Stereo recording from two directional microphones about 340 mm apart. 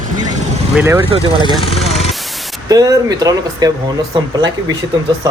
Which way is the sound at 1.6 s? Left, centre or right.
Centre.